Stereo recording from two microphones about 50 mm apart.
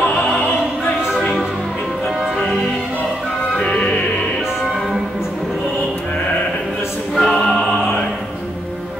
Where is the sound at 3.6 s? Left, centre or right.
Left.